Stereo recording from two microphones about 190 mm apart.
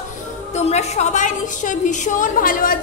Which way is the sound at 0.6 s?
35° left (ahead or behind).